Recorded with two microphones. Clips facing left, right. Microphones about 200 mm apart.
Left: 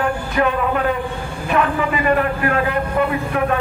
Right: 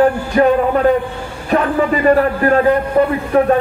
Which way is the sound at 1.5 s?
35° right (ahead or behind).